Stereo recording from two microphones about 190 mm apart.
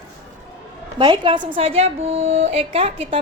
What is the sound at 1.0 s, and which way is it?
A woman's voice, 25° right (ahead or behind).